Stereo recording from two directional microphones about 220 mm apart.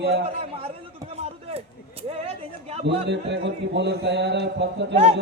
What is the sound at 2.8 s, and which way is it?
A man's voice, 50° right (ahead or behind).